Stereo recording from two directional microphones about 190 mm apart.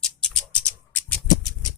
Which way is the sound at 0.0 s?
5° left (ahead or behind).